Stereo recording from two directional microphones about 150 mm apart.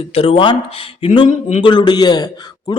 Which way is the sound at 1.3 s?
50° left (ahead or behind).